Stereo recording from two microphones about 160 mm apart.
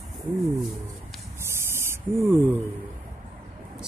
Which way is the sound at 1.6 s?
15° right (ahead or behind).